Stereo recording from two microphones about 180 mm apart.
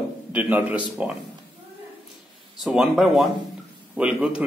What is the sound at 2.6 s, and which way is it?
A man's voice, centre (ahead or behind).